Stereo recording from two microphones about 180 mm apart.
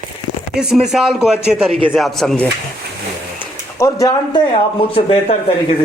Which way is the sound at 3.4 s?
15° left (ahead or behind).